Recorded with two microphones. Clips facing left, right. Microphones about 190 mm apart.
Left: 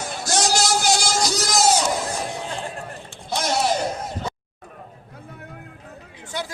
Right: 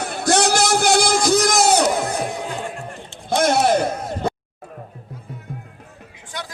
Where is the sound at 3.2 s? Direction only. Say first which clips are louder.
Right 6 dB; 55° right (ahead or behind).